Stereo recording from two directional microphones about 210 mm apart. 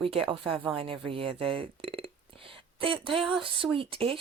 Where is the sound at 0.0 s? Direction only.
25° right (ahead or behind).